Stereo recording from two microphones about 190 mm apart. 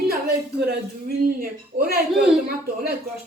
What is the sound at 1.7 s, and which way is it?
Speech, 60° right (ahead or behind).